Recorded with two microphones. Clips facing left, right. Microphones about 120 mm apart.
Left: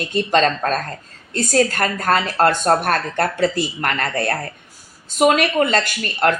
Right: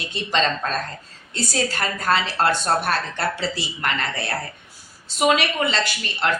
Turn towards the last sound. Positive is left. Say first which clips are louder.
# left 5 dB
turn(degrees=50)  # may be behind; listen again after turning